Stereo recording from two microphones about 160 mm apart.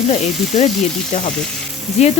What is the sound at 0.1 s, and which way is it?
Speech, 45° left (ahead or behind).